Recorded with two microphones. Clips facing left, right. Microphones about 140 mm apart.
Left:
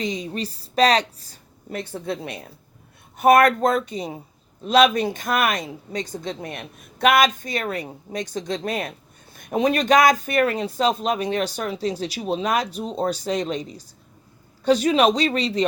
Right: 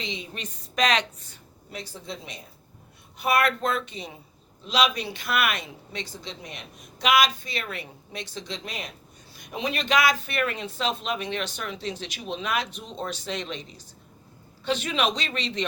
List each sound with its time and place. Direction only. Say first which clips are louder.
0.0 s speech: left 9 dB; 40° left (ahead or behind)
1.7 s a woman's voice: left 9 dB; 60° left (ahead or behind)
3.2 s speech: left 9 dB; 45° left (ahead or behind)
4.6 s speech: left 8 dB; 50° left (ahead or behind)